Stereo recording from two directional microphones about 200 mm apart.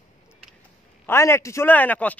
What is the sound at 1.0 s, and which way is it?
A man's voice, 10° left (ahead or behind).